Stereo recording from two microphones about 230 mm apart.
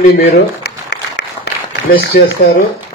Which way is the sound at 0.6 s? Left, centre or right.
Left.